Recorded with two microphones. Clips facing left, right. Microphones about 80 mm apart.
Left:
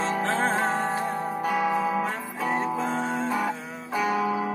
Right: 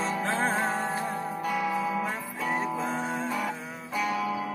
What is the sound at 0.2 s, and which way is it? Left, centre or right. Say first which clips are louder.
Music: left 2 dB; centre.